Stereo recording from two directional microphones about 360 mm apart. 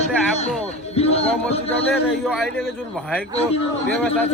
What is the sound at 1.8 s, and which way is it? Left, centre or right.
Speech, centre.